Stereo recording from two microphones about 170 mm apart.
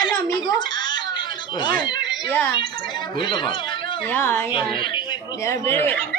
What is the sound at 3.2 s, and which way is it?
Speech, 30° left (ahead or behind).